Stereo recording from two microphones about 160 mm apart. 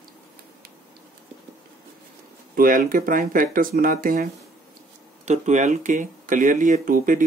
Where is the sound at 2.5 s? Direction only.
60° right (ahead or behind).